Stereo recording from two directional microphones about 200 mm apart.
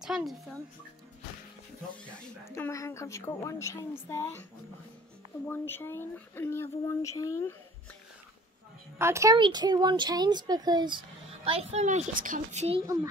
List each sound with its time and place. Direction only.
0.0 s speech: centre (ahead or behind)
2.0 s speech: 10° left (ahead or behind)
5.5 s speech: 10° left (ahead or behind)
8.9 s speech: 15° right (ahead or behind)
11.4 s a child's voice: 30° right (ahead or behind)